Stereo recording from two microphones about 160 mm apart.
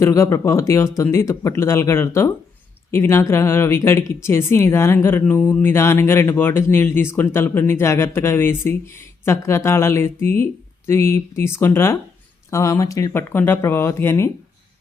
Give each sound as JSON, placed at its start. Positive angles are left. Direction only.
{"t": 0.0, "sound": "speech", "side_deg": 15}